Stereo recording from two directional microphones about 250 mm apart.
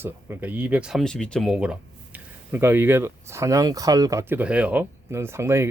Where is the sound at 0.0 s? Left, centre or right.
Centre.